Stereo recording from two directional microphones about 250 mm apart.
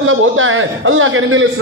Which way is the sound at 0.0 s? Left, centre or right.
Right.